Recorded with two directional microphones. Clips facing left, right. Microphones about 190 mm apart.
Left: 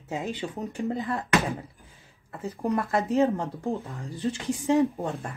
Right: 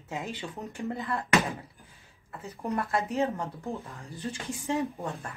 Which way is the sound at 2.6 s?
30° left (ahead or behind).